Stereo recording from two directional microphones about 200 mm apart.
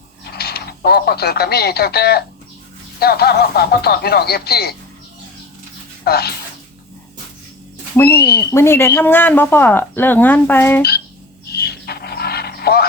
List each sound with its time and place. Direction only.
0.3 s speech: 50° left (ahead or behind)
6.1 s speech: 50° left (ahead or behind)
7.9 s speech: 10° left (ahead or behind)
11.5 s a sound: 50° left (ahead or behind)